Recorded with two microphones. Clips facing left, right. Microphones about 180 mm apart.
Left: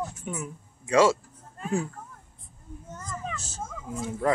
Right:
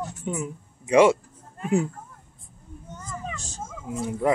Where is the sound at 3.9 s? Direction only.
15° right (ahead or behind).